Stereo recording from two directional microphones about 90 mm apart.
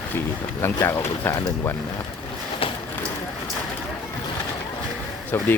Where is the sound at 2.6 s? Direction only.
90° left.